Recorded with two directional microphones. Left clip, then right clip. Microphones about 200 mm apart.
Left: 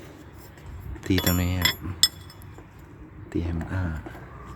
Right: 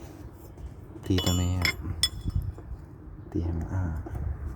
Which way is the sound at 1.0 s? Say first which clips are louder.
Left 3 dB; 15° left (ahead or behind).